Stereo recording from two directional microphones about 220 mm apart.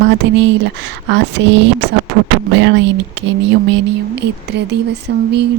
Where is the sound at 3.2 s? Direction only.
55° right (ahead or behind).